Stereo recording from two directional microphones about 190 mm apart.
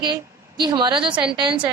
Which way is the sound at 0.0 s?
20° right (ahead or behind).